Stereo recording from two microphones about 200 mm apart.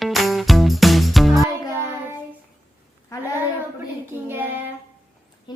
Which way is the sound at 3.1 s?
15° left (ahead or behind).